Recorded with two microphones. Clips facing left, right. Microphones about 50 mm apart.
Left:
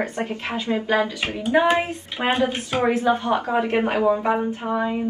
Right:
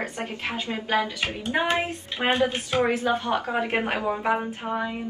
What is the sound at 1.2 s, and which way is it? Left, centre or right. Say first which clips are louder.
A woman's voice: left 6 dB; left.